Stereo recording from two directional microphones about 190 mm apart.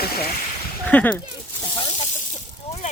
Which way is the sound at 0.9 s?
5° left (ahead or behind).